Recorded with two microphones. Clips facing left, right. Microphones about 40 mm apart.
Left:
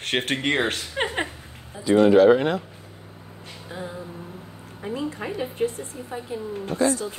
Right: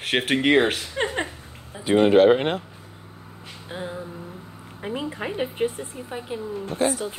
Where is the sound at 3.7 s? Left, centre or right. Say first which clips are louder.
Right 2 dB; right.